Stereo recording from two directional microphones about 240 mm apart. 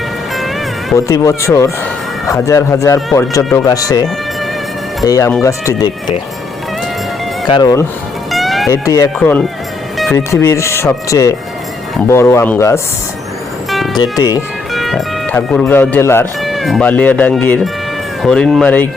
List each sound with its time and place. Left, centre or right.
0.3 s music: centre
0.9 s speech: centre
5.0 s speech: centre
7.4 s speech: centre
8.3 s music: centre
8.7 s speech: centre
13.7 s music: centre
13.9 s speech: centre
14.7 s speech: centre